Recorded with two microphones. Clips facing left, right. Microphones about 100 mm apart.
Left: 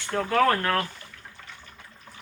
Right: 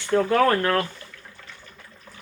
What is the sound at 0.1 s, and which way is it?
Speech, 10° right (ahead or behind).